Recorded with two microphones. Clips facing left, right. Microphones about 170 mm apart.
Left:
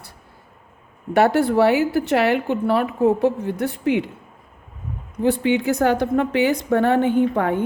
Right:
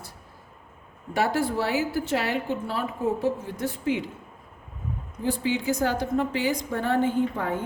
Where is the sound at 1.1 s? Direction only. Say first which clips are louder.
Left 9 dB; 65° left (ahead or behind).